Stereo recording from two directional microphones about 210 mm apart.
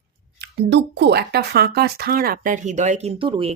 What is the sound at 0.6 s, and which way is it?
Speech, 55° right (ahead or behind).